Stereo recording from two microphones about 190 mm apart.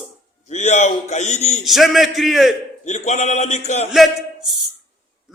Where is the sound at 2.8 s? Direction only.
35° left (ahead or behind).